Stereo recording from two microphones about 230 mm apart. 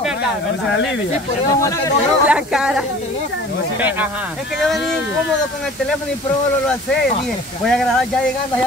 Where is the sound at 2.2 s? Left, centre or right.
Centre.